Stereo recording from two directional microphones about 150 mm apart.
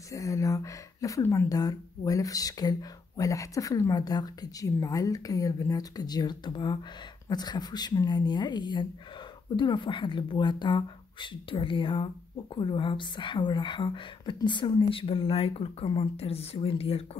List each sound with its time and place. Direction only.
0.1 s speech: 20° left (ahead or behind); by 17.2 s 40° left (ahead or behind)